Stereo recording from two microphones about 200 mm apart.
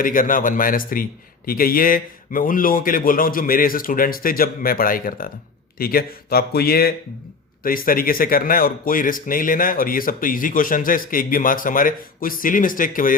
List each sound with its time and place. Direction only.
0.0 s speech: 45° left (ahead or behind)